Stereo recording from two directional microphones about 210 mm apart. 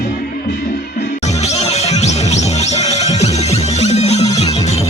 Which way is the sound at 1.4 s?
30° left (ahead or behind).